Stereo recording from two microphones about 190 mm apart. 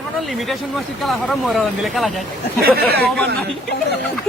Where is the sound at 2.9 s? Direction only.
55° right (ahead or behind).